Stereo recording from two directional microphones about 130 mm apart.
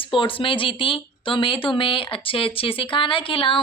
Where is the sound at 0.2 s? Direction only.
40° left (ahead or behind).